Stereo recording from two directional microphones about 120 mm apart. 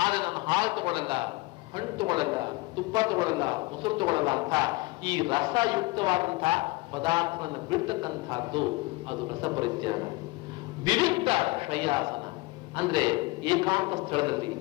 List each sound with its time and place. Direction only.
0.0 s a man's voice: 40° right (ahead or behind)